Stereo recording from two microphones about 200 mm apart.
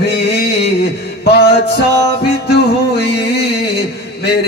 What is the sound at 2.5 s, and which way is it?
Music, 55° left (ahead or behind).